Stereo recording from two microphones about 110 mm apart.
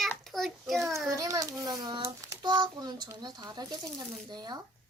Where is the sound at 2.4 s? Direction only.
40° right (ahead or behind).